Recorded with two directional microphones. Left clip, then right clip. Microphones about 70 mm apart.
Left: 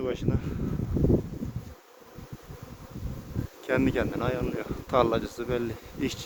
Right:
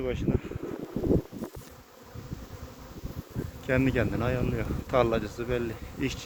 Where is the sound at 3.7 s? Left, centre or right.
Left.